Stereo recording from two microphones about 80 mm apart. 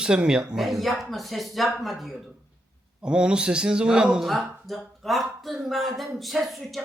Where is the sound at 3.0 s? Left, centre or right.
Centre.